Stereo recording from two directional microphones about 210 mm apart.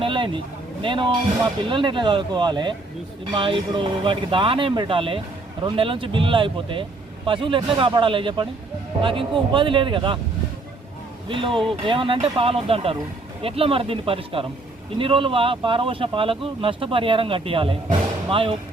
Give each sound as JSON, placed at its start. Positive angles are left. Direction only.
{"t": 0.0, "sound": "vehicle", "side_deg": -25}
{"t": 1.7, "sound": "speech", "side_deg": -25}
{"t": 11.3, "sound": "speech", "side_deg": -25}